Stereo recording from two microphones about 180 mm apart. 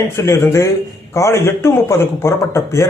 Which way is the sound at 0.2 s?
15° left (ahead or behind).